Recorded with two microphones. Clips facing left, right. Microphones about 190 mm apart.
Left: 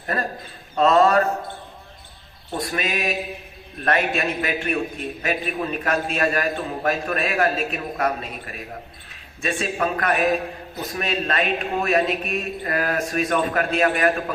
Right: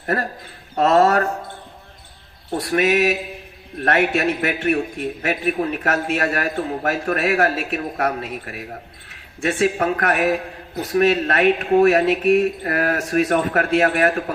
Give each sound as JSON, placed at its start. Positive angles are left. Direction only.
{"t": 0.8, "sound": "speech", "side_deg": -65}
{"t": 2.6, "sound": "a man's voice", "side_deg": -70}
{"t": 9.0, "sound": "a sound", "side_deg": -70}
{"t": 9.8, "sound": "a man's voice", "side_deg": -70}